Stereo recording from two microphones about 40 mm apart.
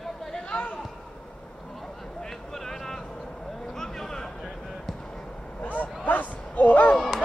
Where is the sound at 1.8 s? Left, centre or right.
Centre.